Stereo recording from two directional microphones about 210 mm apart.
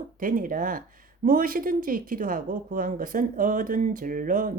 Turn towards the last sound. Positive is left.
turn(degrees=-40)  # may be behind; listen again after turning